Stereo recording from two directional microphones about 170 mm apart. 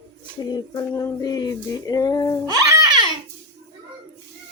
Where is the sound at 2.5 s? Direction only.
20° right (ahead or behind).